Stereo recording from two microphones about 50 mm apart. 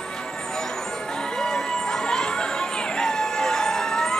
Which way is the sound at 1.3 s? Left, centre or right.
Centre.